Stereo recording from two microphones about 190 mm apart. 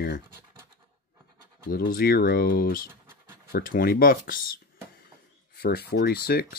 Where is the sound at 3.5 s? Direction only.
50° left (ahead or behind).